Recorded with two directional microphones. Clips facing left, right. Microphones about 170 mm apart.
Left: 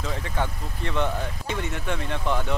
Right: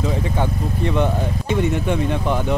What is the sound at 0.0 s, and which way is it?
Speech, 15° right (ahead or behind).